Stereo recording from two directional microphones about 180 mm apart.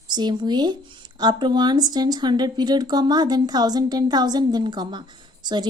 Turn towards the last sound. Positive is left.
turn(degrees=-25)  # may be behind; listen again after turning